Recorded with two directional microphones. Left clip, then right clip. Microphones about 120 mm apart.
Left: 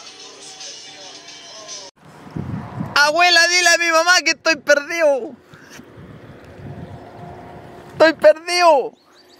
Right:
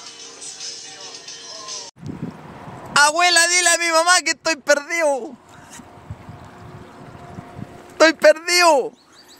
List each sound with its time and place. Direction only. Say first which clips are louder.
2.9 s a man's voice: left 1 dB; 10° left (ahead or behind)
8.0 s speech: left 1 dB; 25° right (ahead or behind)